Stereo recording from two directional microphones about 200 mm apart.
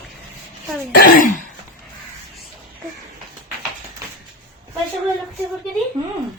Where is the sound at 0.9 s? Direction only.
45° left (ahead or behind).